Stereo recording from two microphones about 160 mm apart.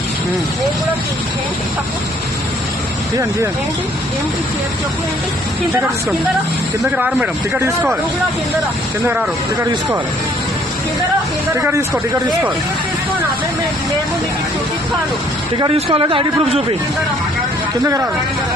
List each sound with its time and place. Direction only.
6.9 s speech: 10° right (ahead or behind)
9.0 s speech: 10° right (ahead or behind)
11.5 s speech: 15° right (ahead or behind)
15.5 s speech: 30° right (ahead or behind)